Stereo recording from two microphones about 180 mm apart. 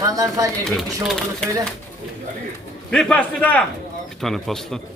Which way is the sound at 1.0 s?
Centre (ahead or behind).